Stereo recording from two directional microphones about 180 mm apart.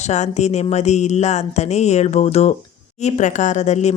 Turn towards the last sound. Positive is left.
turn(degrees=40)  # may be behind; listen again after turning